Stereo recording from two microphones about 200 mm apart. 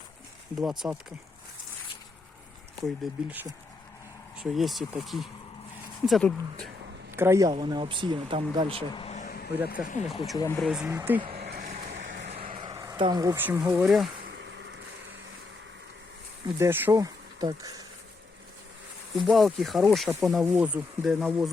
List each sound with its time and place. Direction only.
0.5 s speech: centre (ahead or behind)
2.8 s speech: 5° right (ahead or behind)
4.4 s speech: centre (ahead or behind)
7.1 s speech: 10° right (ahead or behind); by 8.8 s 25° right (ahead or behind)
9.0 s vehicle: 35° left (ahead or behind)
10.3 s speech: 15° left (ahead or behind)
10.6 s speech: 5° right (ahead or behind)
11.3 s a sound: 50° right (ahead or behind)
12.5 s speech: 20° right (ahead or behind); by 14.1 s centre (ahead or behind)
14.3 s a sound: 65° right (ahead or behind)
16.6 s speech: 10° right (ahead or behind)
19.1 s speech: centre (ahead or behind)